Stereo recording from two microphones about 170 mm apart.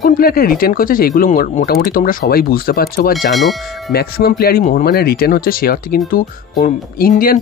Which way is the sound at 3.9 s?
65° left (ahead or behind).